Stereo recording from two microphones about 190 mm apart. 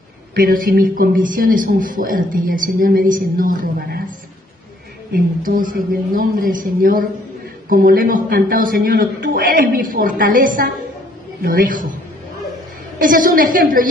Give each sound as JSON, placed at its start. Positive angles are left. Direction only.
{"t": 0.3, "sound": "speech", "side_deg": -50}
{"t": 5.1, "sound": "speech", "side_deg": -45}
{"t": 13.0, "sound": "speech", "side_deg": -45}